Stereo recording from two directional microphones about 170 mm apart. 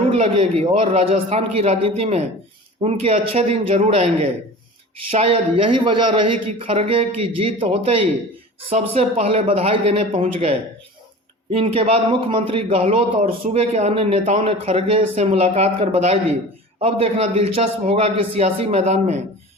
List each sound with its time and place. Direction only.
0.1 s speech: 35° right (ahead or behind)